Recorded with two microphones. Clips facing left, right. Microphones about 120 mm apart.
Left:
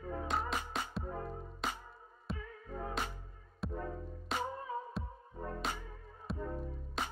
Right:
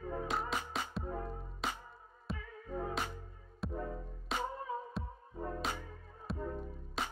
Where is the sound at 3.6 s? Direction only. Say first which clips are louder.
Even; centre (ahead or behind).